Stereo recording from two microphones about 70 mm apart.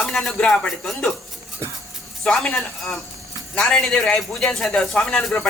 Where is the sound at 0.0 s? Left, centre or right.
Centre.